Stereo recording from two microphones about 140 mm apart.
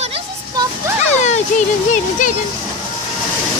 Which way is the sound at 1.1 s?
55° left (ahead or behind).